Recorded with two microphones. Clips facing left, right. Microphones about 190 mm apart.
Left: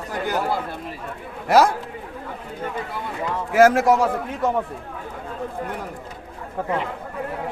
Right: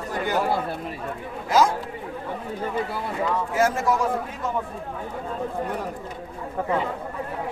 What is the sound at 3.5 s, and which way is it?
A man's voice, 80° left.